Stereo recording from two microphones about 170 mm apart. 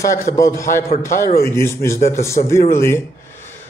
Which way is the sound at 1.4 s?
15° left (ahead or behind).